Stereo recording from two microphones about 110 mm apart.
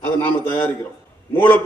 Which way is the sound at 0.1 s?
20° left (ahead or behind).